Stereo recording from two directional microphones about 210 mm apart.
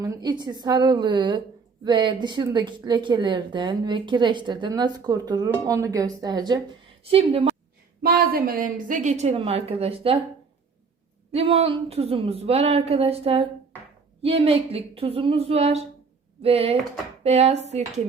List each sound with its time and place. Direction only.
0.0 s a woman's voice: 15° right (ahead or behind)
8.0 s a woman's voice: 45° right (ahead or behind); by 10.2 s 25° right (ahead or behind)
11.3 s a woman's voice: 30° right (ahead or behind)